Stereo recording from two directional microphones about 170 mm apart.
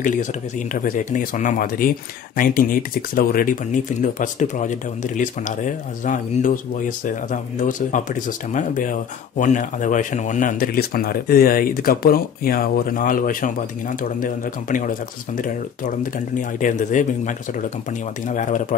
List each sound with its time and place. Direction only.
0.0 s a man's voice: 50° left (ahead or behind)